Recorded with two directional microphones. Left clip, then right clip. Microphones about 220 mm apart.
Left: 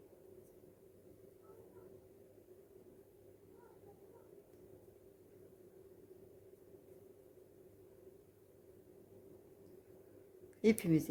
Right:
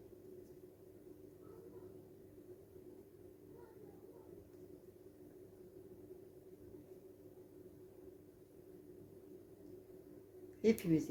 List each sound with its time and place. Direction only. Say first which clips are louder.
10.6 s speech: left 1 dB; 45° left (ahead or behind)